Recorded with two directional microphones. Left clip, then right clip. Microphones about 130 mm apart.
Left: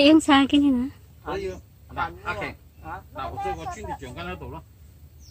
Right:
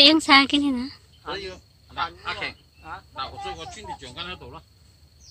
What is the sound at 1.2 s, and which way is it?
Speech, 20° left (ahead or behind).